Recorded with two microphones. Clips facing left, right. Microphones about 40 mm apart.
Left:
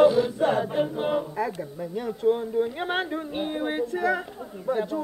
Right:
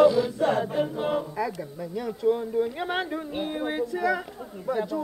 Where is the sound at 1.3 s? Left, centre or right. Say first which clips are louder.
Left 1 dB; left.